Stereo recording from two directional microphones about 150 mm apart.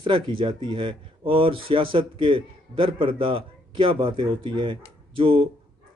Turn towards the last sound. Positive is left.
turn(degrees=-35)  # may be behind; listen again after turning